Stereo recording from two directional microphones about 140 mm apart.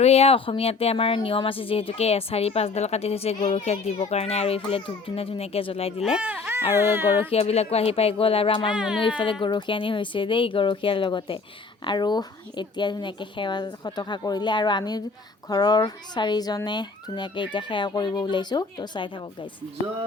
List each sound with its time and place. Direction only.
0.0 s speech: 50° left (ahead or behind)
6.0 s speech: 5° right (ahead or behind)
7.3 s speech: 45° left (ahead or behind)
8.7 s speech: 5° right (ahead or behind)
9.0 s speech: 35° left (ahead or behind)